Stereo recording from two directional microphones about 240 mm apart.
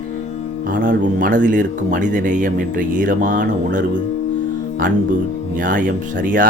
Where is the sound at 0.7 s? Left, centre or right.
Right.